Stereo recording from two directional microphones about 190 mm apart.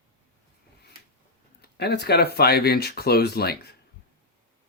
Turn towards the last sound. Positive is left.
turn(degrees=55)  # may be behind; listen again after turning